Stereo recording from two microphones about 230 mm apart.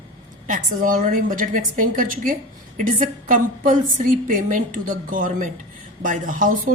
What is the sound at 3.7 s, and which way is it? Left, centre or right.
Speech, right.